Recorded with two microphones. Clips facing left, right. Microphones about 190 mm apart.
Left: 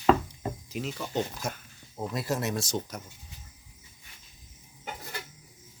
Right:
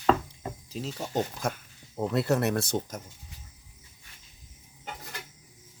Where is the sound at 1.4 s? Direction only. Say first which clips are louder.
Right 4 dB; 55° right (ahead or behind).